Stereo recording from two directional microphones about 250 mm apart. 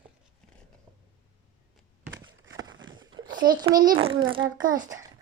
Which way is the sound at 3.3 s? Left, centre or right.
Right.